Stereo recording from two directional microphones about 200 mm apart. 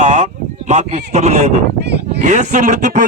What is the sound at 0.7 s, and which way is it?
A man's voice, 35° right (ahead or behind).